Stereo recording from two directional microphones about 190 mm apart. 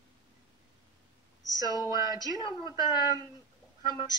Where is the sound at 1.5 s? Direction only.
20° right (ahead or behind).